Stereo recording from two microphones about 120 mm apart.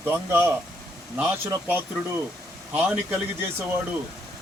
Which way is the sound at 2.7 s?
15° right (ahead or behind).